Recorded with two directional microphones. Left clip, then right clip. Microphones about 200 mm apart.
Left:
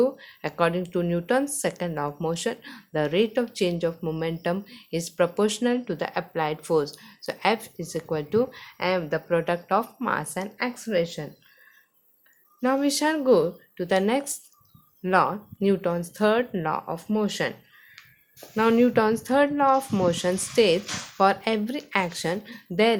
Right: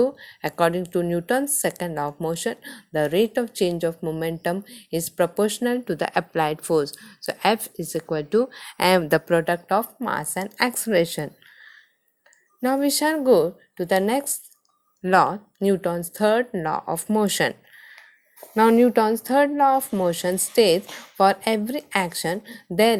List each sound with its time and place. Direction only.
0.0 s speech: 25° right (ahead or behind); by 9.3 s 45° right (ahead or behind)
9.3 s speech: 25° right (ahead or behind)
10.6 s a woman's voice: 40° right (ahead or behind)
12.6 s speech: 25° right (ahead or behind)
16.9 s a woman's voice: 35° right (ahead or behind)
18.5 s speech: 30° right (ahead or behind)